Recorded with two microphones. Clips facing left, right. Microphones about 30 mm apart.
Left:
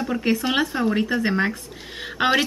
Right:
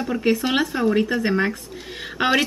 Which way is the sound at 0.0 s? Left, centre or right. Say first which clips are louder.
Right 1 dB; centre.